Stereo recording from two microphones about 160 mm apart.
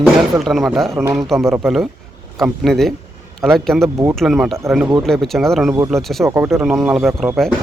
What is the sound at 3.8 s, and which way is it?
Speech, 20° right (ahead or behind).